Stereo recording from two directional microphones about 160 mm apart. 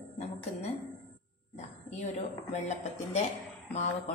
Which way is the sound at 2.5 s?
45° left (ahead or behind).